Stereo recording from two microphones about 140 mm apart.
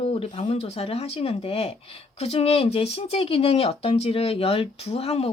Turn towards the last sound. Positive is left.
turn(degrees=45)  # may be behind; listen again after turning